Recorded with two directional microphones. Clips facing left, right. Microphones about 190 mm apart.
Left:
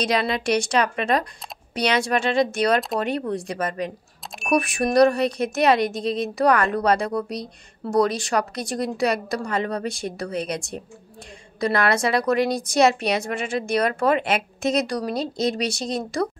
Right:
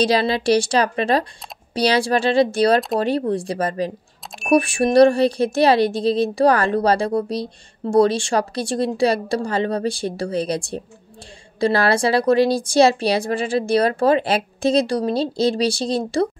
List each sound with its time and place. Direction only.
0.0 s speech: 30° right (ahead or behind)